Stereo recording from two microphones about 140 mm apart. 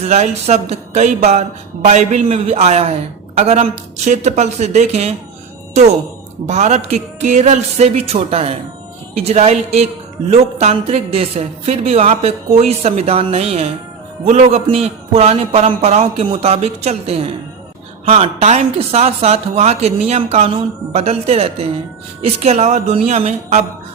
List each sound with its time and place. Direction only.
0.0 s a woman's voice: 50° right (ahead or behind)
6.5 s a woman's voice: 55° right (ahead or behind)